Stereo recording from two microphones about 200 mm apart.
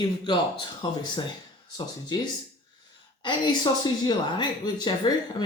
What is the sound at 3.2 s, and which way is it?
Speech, 20° left (ahead or behind).